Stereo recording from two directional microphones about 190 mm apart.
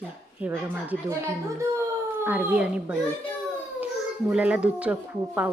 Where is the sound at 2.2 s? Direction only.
10° right (ahead or behind).